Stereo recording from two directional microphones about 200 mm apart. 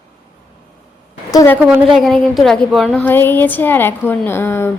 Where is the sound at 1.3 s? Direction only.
15° left (ahead or behind).